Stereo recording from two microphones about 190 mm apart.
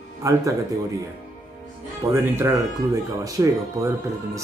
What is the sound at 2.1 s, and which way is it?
Speech, 15° right (ahead or behind).